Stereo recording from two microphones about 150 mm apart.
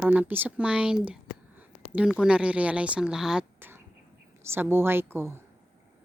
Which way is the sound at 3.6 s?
15° right (ahead or behind).